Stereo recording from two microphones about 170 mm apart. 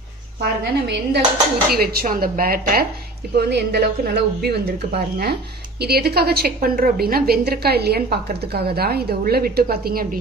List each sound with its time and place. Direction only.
0.4 s a woman's voice: 75° right (ahead or behind)
1.7 s speech: 65° right (ahead or behind)
3.3 s a woman's voice: 75° right (ahead or behind)